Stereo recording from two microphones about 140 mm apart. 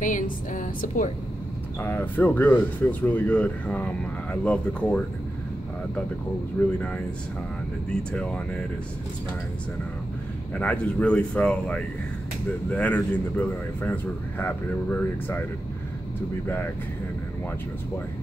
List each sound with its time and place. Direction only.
0.0 s speech: 65° left (ahead or behind)
1.8 s speech: 15° left (ahead or behind)
6.6 s speech: 15° left (ahead or behind)
7.9 s speech: 5° left (ahead or behind)
10.5 s speech: 10° left (ahead or behind)